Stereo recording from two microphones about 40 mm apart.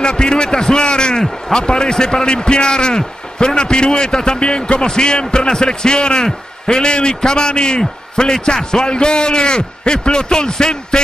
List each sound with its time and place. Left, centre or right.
0.0 s speech: centre